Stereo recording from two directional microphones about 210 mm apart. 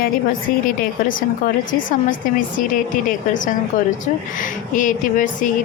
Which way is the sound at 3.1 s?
40° left (ahead or behind).